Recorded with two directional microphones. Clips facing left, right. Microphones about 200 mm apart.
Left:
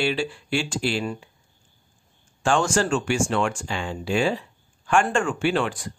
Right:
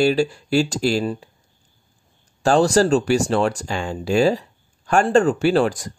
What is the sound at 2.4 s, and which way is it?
Speech, 35° right (ahead or behind).